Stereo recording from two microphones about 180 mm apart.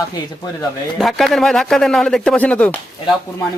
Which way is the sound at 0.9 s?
Centre (ahead or behind).